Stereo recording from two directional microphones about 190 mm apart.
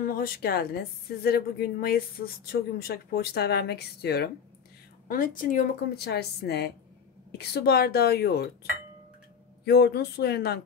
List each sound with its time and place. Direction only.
0.0 s speech: 50° left (ahead or behind)
5.0 s a woman's voice: 50° left (ahead or behind)
9.7 s a woman's voice: 60° left (ahead or behind)